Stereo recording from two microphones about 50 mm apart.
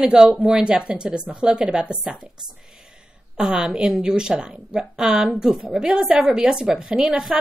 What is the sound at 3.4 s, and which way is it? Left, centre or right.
A woman's voice, centre.